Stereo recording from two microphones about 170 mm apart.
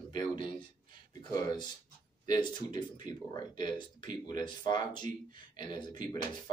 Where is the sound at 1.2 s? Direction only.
25° left (ahead or behind).